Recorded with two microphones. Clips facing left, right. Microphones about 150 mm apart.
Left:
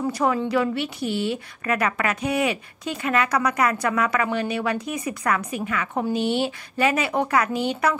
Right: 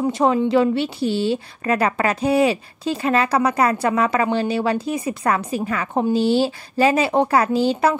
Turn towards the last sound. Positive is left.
turn(degrees=-30)  # may be behind; listen again after turning